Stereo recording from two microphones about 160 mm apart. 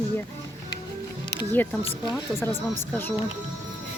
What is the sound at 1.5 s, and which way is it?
A woman's voice, 10° left (ahead or behind).